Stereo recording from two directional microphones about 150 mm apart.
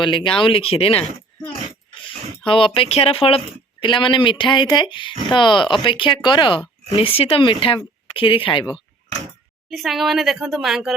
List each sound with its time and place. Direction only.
0.0 s speech: 35° left (ahead or behind)
2.5 s speech: 35° left (ahead or behind)
9.6 s a woman's voice: centre (ahead or behind)